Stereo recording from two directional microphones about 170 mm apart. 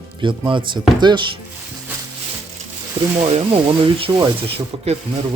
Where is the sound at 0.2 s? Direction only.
30° right (ahead or behind).